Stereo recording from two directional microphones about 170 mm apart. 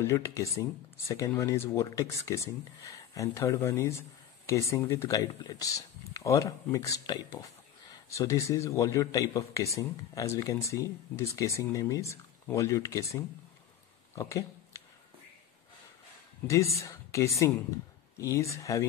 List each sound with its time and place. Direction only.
0.0 s speech: 15° left (ahead or behind)
14.1 s a sound: 20° left (ahead or behind)
16.4 s speech: 20° left (ahead or behind)